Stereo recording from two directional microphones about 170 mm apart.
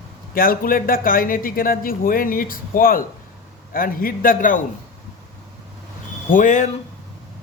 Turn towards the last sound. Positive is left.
turn(degrees=50)  # may be behind; listen again after turning